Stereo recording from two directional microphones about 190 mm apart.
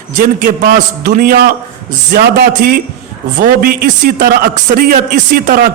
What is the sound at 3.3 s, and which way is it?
A man's voice, 45° right (ahead or behind).